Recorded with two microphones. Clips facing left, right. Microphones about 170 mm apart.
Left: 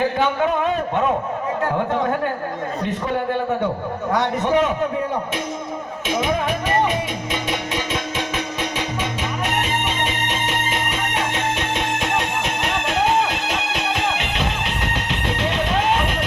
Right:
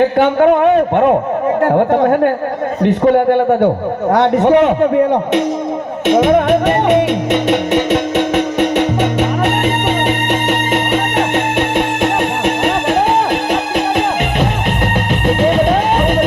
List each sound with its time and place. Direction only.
0.2 s a man's voice: 60° right (ahead or behind)
4.1 s a man's voice: 60° right (ahead or behind)
6.1 s music: 70° right (ahead or behind)
12.6 s music: 55° right (ahead or behind)
15.3 s music: 50° right (ahead or behind)